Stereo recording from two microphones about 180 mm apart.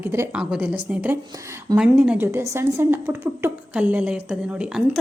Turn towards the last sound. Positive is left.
turn(degrees=-5)  # may be behind; listen again after turning